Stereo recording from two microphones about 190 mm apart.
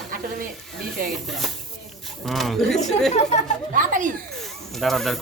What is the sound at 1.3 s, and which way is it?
Speech, centre (ahead or behind).